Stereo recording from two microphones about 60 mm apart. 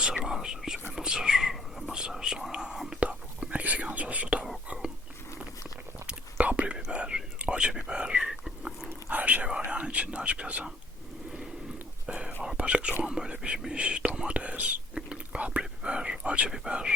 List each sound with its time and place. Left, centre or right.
0.3 s whispering: centre
3.0 s whispering: centre
6.1 s whispering: right
8.9 s whispering: right
12.0 s whispering: centre